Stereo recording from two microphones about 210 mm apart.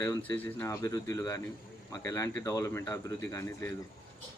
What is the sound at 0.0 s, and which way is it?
Speech, 10° left (ahead or behind).